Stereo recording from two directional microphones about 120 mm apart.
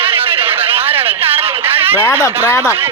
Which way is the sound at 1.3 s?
55° right (ahead or behind).